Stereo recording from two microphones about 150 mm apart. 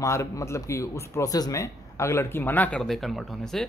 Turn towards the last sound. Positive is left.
turn(degrees=0)  # may be behind; listen again after turning